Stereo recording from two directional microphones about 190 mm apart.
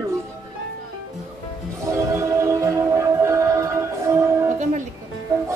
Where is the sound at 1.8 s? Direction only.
15° right (ahead or behind).